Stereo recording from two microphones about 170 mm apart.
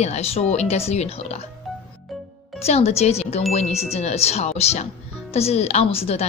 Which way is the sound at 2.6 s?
40° left (ahead or behind).